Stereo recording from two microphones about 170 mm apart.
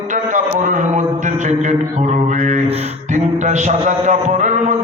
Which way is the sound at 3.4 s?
45° right (ahead or behind).